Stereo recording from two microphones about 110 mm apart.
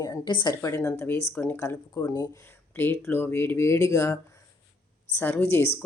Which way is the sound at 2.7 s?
20° left (ahead or behind).